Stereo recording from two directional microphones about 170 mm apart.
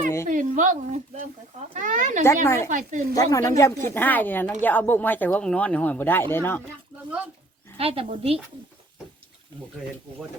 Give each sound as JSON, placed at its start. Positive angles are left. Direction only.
{"t": 0.3, "sound": "a woman's voice", "side_deg": -50}
{"t": 2.2, "sound": "speech", "side_deg": 15}
{"t": 2.6, "sound": "speech", "side_deg": -50}
{"t": 3.2, "sound": "speech", "side_deg": 20}
{"t": 7.8, "sound": "speech", "side_deg": -35}